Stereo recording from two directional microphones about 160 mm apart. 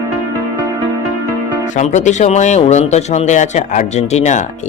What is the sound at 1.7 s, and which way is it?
Speech, 45° left (ahead or behind).